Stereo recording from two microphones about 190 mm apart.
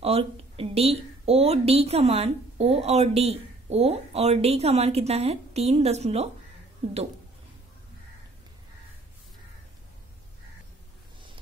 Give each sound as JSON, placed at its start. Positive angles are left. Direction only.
{"t": 0.0, "sound": "a woman's voice", "side_deg": -30}